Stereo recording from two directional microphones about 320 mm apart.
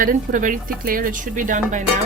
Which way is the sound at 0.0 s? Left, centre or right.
Right.